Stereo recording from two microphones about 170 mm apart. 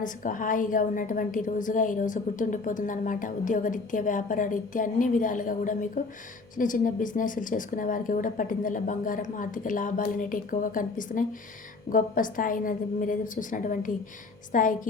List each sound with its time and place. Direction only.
0.0 s a woman's voice: 50° left (ahead or behind)